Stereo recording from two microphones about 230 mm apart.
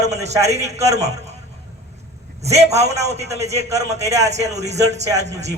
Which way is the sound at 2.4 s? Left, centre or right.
Right.